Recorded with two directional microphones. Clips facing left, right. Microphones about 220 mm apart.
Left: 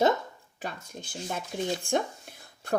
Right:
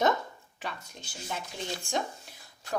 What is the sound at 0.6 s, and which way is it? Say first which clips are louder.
Speech: left 3 dB; 45° left (ahead or behind).